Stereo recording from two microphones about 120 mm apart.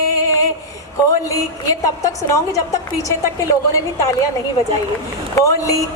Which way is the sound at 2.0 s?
25° left (ahead or behind).